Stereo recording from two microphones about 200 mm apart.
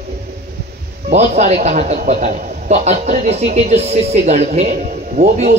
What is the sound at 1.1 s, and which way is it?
A man's voice, 35° right (ahead or behind).